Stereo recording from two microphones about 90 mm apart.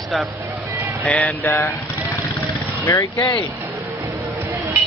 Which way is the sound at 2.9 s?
35° left (ahead or behind).